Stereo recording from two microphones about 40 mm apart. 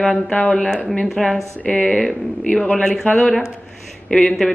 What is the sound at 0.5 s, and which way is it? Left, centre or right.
Speech, centre.